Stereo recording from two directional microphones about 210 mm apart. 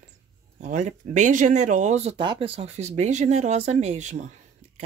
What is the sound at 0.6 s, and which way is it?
Speech, 35° right (ahead or behind).